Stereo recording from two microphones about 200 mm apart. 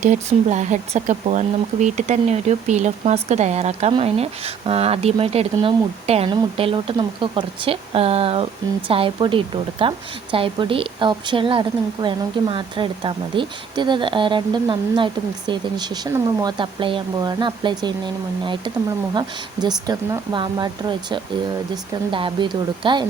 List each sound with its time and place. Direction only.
0.0 s speech: 35° right (ahead or behind)